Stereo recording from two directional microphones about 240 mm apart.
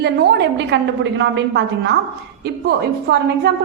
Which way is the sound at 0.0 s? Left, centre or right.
Right.